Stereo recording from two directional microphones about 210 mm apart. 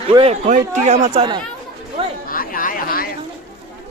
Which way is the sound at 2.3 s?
40° left (ahead or behind).